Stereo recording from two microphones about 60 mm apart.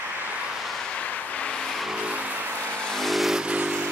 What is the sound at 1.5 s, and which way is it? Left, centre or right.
Vehicle, centre.